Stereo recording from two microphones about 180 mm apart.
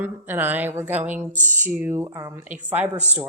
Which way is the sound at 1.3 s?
45° right (ahead or behind).